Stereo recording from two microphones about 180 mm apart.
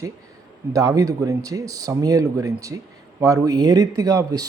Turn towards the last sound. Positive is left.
turn(degrees=-20)  # may be behind; listen again after turning